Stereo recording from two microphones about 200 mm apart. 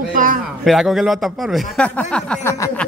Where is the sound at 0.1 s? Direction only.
40° right (ahead or behind).